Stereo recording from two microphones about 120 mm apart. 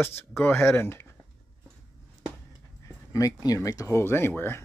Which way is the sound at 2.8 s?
25° left (ahead or behind).